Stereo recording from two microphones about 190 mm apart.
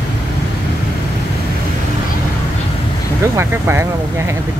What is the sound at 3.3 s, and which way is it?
Speech, 10° right (ahead or behind).